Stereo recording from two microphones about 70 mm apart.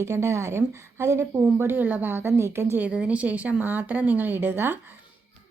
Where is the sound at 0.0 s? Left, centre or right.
Right.